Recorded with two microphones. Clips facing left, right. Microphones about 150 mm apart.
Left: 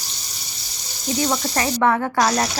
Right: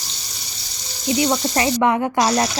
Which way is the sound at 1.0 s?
10° right (ahead or behind).